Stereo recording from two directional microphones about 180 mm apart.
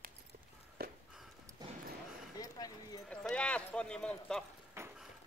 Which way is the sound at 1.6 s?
20° right (ahead or behind).